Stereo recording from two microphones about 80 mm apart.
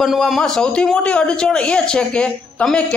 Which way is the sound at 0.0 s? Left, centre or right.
Centre.